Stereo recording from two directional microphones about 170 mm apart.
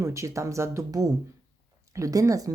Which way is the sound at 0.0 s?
15° right (ahead or behind).